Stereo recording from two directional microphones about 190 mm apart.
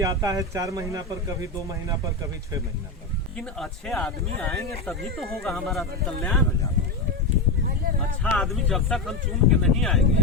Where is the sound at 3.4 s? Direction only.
5° left (ahead or behind).